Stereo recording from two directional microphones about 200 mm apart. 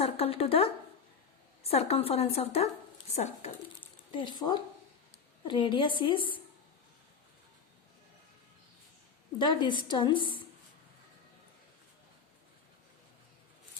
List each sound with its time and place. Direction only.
0.0 s a woman's voice: 30° left (ahead or behind)
9.4 s a woman's voice: 25° left (ahead or behind)